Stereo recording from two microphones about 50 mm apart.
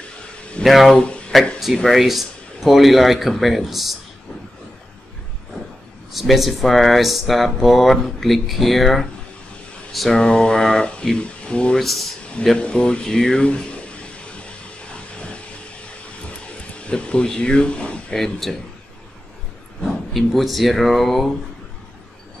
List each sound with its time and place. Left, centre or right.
0.7 s speech: centre
0.9 s speech: left
1.9 s speech: centre
6.1 s speech: centre; by 11.8 s left
11.8 s speech: centre
12.5 s a sound: left
18.1 s speech: centre
19.8 s speech: centre